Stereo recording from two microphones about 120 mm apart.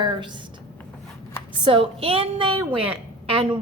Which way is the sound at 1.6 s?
50° right (ahead or behind).